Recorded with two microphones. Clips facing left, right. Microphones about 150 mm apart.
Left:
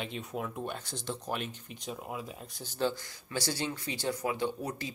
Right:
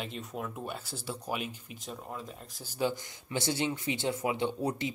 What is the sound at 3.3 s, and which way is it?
Speech, 20° right (ahead or behind).